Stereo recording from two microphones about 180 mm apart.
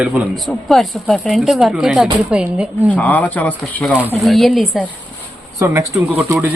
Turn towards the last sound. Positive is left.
turn(degrees=-15)  # may be behind; listen again after turning